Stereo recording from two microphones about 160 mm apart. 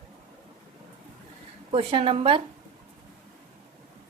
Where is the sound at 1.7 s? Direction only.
35° right (ahead or behind).